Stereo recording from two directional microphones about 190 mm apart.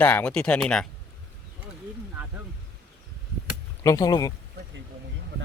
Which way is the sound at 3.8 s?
20° left (ahead or behind).